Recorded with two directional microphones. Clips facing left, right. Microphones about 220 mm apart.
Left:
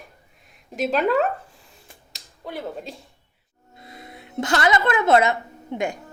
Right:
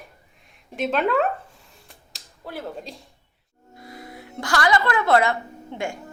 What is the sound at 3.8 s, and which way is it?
A woman's voice, 25° left (ahead or behind).